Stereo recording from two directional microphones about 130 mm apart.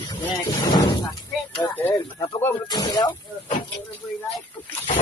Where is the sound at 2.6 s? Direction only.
35° left (ahead or behind).